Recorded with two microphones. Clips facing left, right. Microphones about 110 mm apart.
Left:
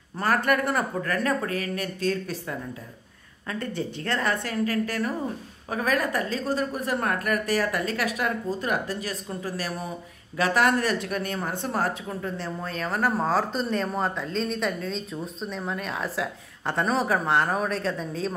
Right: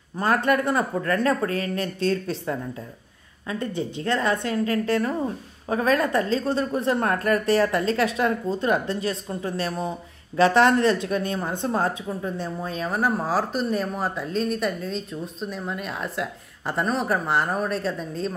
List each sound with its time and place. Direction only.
0.2 s a woman's voice: 20° right (ahead or behind); by 18.3 s centre (ahead or behind)